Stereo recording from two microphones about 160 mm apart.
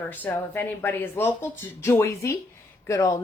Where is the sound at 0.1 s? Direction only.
15° left (ahead or behind).